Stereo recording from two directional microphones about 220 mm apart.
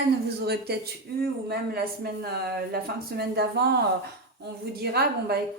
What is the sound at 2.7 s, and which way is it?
Speech, 45° right (ahead or behind).